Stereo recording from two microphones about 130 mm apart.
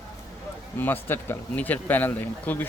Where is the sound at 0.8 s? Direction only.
15° left (ahead or behind).